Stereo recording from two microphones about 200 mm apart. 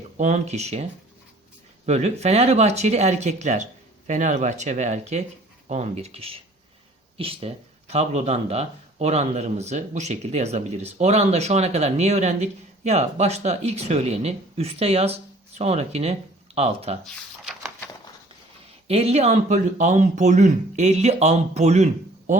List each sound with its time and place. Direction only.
0.2 s speech: 35° right (ahead or behind)
1.9 s speech: 35° right (ahead or behind)
18.9 s speech: 30° right (ahead or behind)
22.3 s a sound: 40° right (ahead or behind)